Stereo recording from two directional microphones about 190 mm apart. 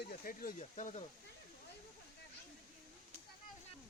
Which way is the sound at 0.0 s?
50° left (ahead or behind).